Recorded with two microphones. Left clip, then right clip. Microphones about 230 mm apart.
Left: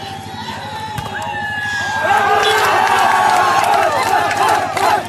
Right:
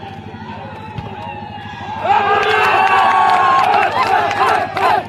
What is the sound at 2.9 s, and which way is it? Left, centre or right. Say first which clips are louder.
Run: right 1 dB; left.